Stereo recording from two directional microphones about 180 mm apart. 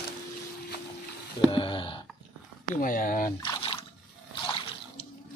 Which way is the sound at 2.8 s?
50° left (ahead or behind).